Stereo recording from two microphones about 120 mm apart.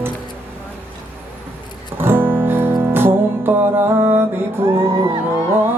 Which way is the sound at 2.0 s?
20° right (ahead or behind).